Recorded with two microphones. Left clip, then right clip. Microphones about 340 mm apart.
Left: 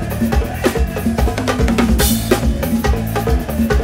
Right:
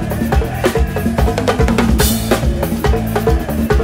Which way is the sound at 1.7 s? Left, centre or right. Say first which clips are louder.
Right 1 dB; centre.